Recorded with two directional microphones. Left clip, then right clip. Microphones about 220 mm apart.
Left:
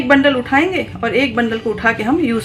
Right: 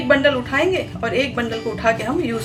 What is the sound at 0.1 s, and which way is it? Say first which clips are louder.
A woman's voice: left 3 dB; 45° left (ahead or behind).